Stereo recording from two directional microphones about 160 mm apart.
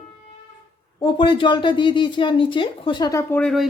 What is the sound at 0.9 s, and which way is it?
Speech, 30° left (ahead or behind).